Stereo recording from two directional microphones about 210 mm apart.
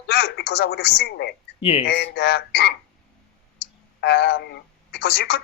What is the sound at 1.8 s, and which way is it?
Speech, 50° left (ahead or behind).